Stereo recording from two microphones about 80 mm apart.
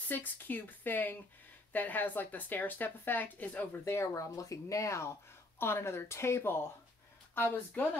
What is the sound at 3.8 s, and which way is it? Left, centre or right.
Speech, left.